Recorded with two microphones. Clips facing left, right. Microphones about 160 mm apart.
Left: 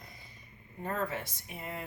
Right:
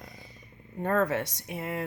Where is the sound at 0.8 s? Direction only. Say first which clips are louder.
Right 8 dB; 75° right (ahead or behind).